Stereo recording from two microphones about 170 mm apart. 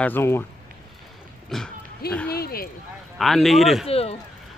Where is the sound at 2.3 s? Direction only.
60° left (ahead or behind).